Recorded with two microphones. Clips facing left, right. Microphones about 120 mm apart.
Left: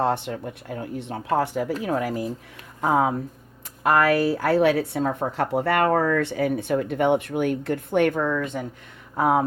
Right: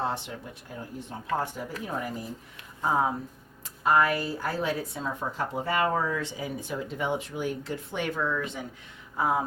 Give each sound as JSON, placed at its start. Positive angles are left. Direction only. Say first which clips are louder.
{"t": 0.0, "sound": "speech", "louder": "left 8 dB", "side_deg": 60}
{"t": 2.8, "sound": "speech", "louder": "left 5 dB", "side_deg": 75}
{"t": 9.1, "sound": "speech", "louder": "left 6 dB", "side_deg": 65}